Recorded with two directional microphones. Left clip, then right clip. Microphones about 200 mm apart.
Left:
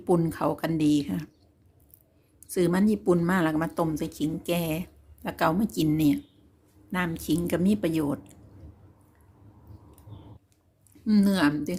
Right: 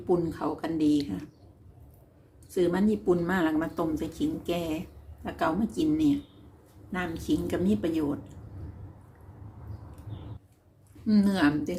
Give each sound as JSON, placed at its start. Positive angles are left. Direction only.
{"t": 0.1, "sound": "speech", "side_deg": 55}
{"t": 2.5, "sound": "speech", "side_deg": 55}
{"t": 11.0, "sound": "speech", "side_deg": 55}